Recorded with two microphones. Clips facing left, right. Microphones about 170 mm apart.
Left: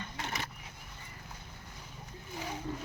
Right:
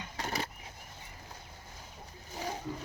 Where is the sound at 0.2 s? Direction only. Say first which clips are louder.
Right 4 dB; 35° right (ahead or behind).